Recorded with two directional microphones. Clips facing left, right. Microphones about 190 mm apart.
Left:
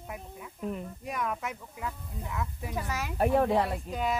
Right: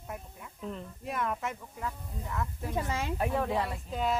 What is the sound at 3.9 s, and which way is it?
Speech, centre (ahead or behind).